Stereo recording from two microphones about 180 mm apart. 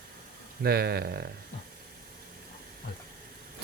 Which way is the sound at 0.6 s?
60° right (ahead or behind).